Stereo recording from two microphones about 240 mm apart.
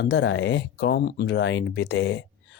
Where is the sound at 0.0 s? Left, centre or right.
Left.